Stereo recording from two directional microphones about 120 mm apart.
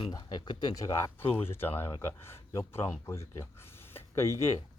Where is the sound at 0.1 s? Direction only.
35° left (ahead or behind).